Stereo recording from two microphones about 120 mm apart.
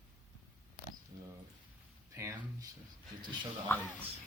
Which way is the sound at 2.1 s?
25° right (ahead or behind).